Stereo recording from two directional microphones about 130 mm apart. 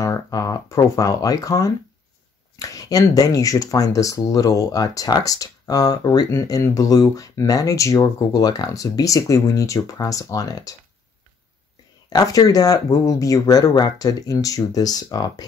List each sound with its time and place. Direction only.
0.0 s speech: 25° left (ahead or behind)
12.1 s speech: 30° left (ahead or behind)